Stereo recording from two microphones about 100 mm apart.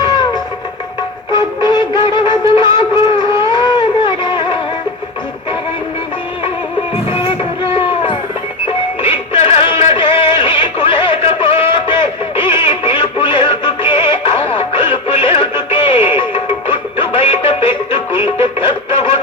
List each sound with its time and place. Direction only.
1.3 s music: 45° left (ahead or behind)
3.4 s a sound: 50° left (ahead or behind)
7.1 s music: 60° left (ahead or behind)